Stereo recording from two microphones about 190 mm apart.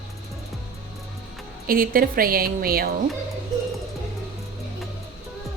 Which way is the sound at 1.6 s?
50° right (ahead or behind).